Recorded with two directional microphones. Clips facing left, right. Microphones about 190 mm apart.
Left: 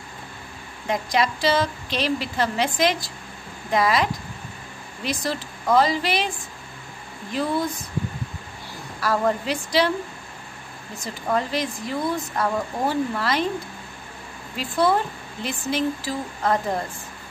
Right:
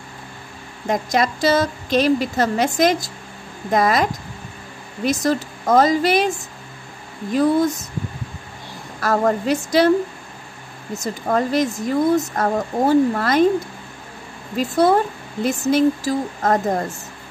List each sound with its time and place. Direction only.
0.8 s speech: 45° right (ahead or behind)
9.0 s speech: 45° right (ahead or behind)
11.0 s speech: 45° right (ahead or behind)
14.6 s speech: 45° right (ahead or behind)